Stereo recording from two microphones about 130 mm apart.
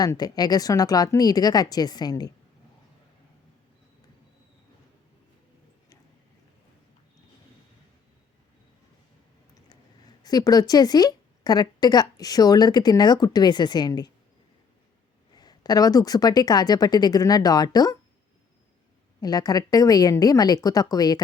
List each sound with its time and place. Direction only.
0.0 s a woman's voice: 30° left (ahead or behind)
10.2 s a woman's voice: 30° left (ahead or behind)
15.4 s a woman's voice: 30° left (ahead or behind)
19.2 s a woman's voice: 30° left (ahead or behind)